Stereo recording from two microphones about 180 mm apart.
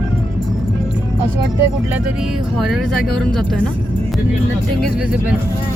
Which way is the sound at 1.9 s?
5° right (ahead or behind).